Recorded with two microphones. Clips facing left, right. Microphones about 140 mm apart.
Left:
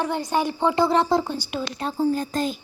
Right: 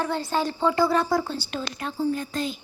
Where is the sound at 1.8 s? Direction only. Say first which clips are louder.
Left 4 dB; 35° left (ahead or behind).